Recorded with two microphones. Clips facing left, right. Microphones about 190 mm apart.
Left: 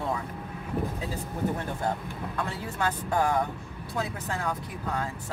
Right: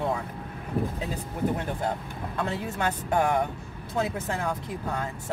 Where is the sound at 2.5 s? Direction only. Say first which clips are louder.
Right 2 dB; 20° right (ahead or behind).